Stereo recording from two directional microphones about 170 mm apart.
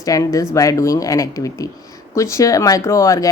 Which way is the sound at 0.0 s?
20° left (ahead or behind).